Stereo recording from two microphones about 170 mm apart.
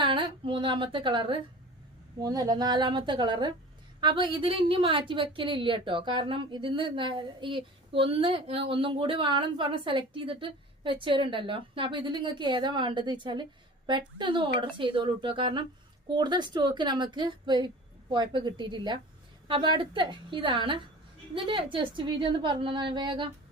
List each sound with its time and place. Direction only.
0.0 s a woman's voice: 30° right (ahead or behind)